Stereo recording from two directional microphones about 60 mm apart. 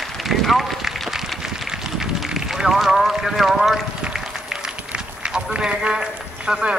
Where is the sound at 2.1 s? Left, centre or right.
Centre.